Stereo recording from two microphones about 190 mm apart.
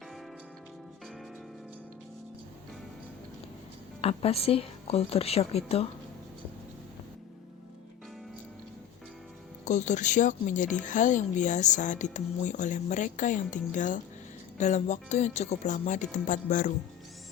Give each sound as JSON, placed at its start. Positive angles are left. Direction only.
{"t": 4.0, "sound": "a woman's voice", "side_deg": 30}
{"t": 9.6, "sound": "a woman's voice", "side_deg": 40}